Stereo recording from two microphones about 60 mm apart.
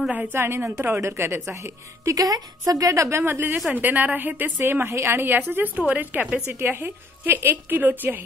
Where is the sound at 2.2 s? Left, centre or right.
Right.